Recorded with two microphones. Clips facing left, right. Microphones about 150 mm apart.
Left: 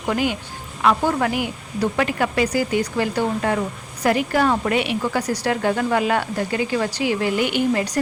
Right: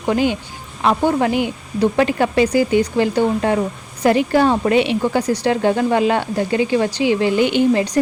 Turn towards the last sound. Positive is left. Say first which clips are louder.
# right 5 dB
turn(degrees=-25)  # may be behind; listen again after turning